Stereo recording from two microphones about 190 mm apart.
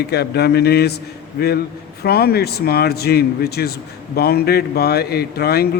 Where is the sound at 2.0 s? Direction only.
55° left (ahead or behind).